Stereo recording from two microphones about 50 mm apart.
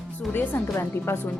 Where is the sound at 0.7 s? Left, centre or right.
Left.